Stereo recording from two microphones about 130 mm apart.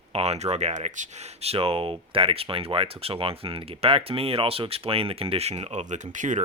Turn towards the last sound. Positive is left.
turn(degrees=-75)  # may be behind; listen again after turning